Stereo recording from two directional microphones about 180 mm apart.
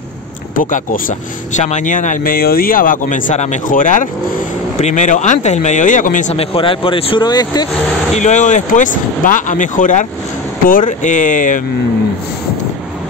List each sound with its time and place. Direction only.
0.6 s speech: 50° left (ahead or behind)
6.3 s speech: 30° left (ahead or behind)
8.1 s speech: 40° left (ahead or behind)